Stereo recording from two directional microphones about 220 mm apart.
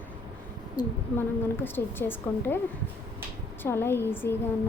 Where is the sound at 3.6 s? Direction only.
10° left (ahead or behind).